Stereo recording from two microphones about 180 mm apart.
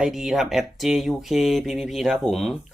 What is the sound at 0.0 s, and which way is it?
Speech, centre (ahead or behind).